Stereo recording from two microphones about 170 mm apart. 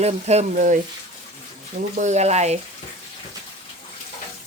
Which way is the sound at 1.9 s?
45° right (ahead or behind).